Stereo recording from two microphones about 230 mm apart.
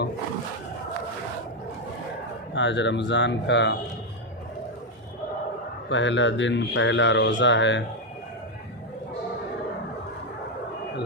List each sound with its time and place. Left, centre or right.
2.6 s speech: left
5.9 s speech: left